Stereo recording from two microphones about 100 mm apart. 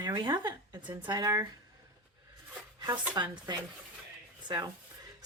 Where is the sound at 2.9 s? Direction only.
50° right (ahead or behind).